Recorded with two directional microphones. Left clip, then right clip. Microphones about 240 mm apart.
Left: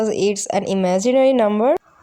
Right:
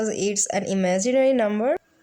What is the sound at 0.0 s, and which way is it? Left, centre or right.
Speech, centre.